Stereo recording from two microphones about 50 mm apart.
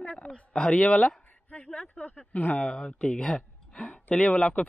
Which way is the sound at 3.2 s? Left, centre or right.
Centre.